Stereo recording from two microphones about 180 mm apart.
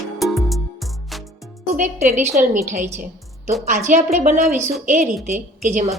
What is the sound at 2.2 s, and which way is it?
A woman's voice, 45° right (ahead or behind).